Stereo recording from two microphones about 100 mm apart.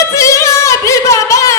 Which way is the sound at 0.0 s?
30° left (ahead or behind).